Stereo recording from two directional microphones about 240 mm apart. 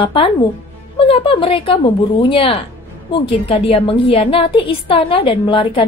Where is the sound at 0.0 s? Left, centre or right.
Left.